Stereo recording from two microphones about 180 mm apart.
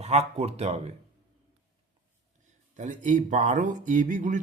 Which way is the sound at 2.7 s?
45° right (ahead or behind).